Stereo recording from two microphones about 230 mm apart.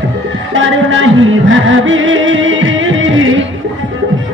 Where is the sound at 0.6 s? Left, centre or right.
Right.